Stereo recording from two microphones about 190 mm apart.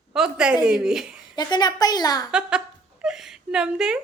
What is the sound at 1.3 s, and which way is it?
Speech, 20° left (ahead or behind).